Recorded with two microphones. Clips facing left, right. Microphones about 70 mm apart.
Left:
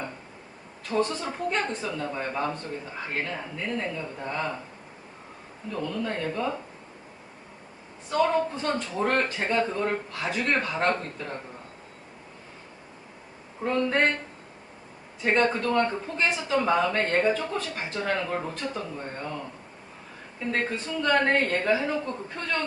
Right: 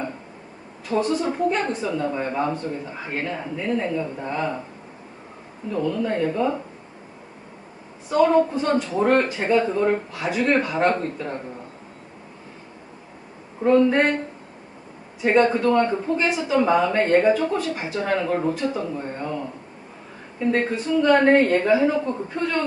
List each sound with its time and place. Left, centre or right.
0.9 s speech: centre
5.7 s speech: centre
8.1 s speech: centre
13.7 s speech: centre
15.2 s speech: centre
20.5 s speech: centre